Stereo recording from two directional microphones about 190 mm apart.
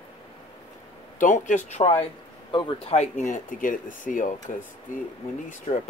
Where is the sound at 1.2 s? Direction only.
40° left (ahead or behind).